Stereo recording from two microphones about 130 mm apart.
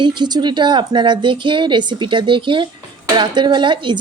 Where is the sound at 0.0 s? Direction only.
35° right (ahead or behind).